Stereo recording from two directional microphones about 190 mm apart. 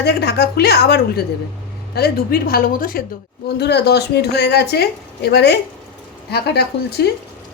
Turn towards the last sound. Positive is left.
turn(degrees=60)  # may be behind; listen again after turning